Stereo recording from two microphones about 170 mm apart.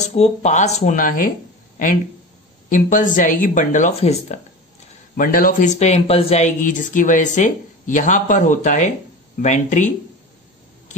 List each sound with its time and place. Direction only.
0.0 s speech: 40° left (ahead or behind)
2.7 s speech: 50° left (ahead or behind)
5.1 s speech: 55° left (ahead or behind)